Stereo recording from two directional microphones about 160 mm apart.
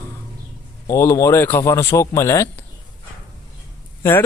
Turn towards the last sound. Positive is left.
turn(degrees=15)  # may be behind; listen again after turning